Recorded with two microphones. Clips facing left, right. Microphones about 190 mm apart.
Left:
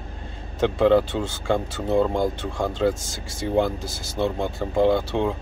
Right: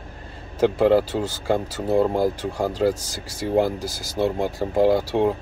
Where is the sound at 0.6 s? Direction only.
35° right (ahead or behind).